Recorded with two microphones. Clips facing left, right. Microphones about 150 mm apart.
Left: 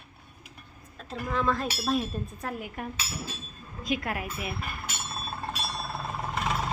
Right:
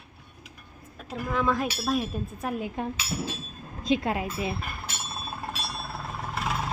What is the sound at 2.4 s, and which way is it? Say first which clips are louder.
Speech: right 8 dB; 20° right (ahead or behind).